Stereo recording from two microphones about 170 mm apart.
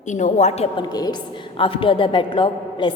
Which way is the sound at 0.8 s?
25° left (ahead or behind).